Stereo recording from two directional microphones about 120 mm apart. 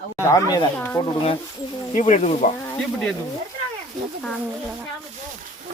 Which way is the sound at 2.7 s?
5° left (ahead or behind).